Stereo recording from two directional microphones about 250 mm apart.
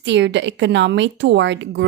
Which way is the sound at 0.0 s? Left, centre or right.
Right.